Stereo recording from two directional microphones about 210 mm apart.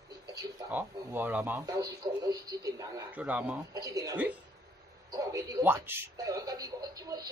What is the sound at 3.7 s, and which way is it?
A man's voice, 15° right (ahead or behind).